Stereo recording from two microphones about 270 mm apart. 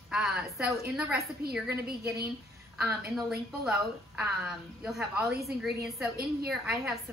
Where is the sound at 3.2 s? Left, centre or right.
Centre.